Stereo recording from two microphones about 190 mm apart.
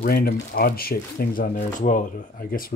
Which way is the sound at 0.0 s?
55° left (ahead or behind).